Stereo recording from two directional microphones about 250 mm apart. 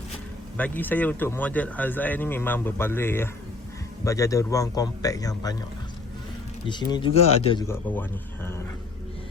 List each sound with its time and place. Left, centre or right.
0.5 s speech: centre
6.7 s speech: centre